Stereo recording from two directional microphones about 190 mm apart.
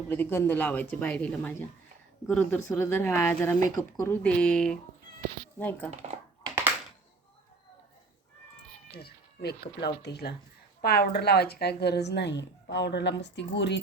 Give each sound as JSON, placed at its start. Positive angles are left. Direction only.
{"t": 0.1, "sound": "speech", "side_deg": 10}
{"t": 8.9, "sound": "a woman's voice", "side_deg": 55}